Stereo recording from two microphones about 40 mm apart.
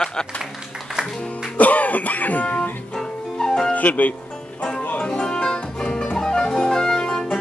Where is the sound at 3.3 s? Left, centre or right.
Centre.